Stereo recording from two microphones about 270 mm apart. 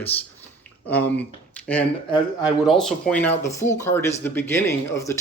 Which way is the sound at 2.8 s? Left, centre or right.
Centre.